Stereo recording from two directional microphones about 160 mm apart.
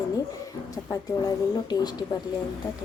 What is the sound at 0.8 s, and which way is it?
Speech, 25° left (ahead or behind).